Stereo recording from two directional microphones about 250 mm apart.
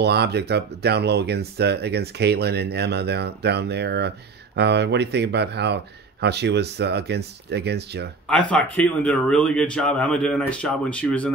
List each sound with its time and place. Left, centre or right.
0.0 s speech: right
8.3 s speech: centre